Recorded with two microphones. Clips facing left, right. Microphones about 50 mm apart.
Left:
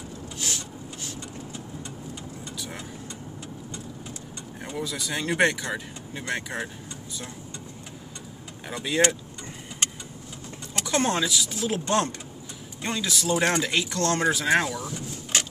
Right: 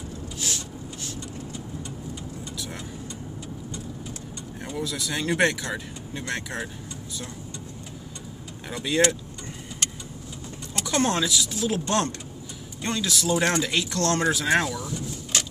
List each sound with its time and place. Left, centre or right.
4.7 s speech: centre
8.6 s speech: centre
10.7 s speech: left
14.8 s vehicle: left